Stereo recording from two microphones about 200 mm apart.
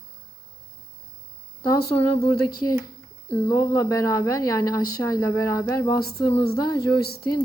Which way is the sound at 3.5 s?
15° left (ahead or behind).